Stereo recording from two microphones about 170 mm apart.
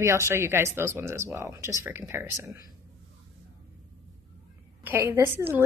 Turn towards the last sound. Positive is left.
turn(degrees=-15)  # may be behind; listen again after turning